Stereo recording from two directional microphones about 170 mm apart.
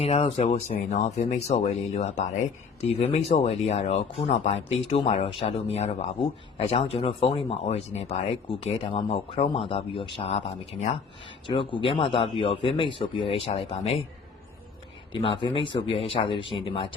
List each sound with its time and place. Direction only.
0.0 s speech: 35° left (ahead or behind)
15.1 s speech: 30° left (ahead or behind)